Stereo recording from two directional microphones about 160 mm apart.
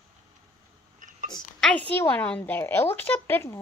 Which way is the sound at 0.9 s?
55° right (ahead or behind).